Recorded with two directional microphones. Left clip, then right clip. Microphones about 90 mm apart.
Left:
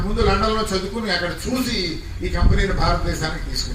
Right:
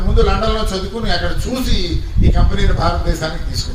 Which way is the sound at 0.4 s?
20° right (ahead or behind).